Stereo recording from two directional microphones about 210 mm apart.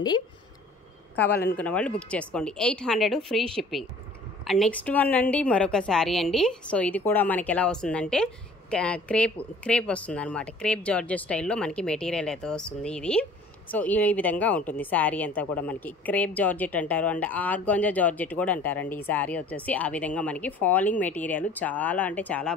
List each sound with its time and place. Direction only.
1.3 s a man's voice: 50° left (ahead or behind)
1.6 s a woman's voice: 5° left (ahead or behind)
4.5 s a woman's voice: 5° left (ahead or behind)